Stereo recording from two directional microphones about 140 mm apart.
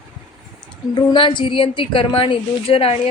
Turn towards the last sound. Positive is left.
turn(degrees=45)  # may be behind; listen again after turning